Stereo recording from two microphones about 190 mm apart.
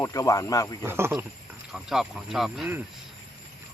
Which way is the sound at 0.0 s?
15° left (ahead or behind).